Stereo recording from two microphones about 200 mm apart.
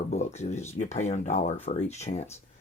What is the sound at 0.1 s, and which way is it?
Speech, 35° left (ahead or behind).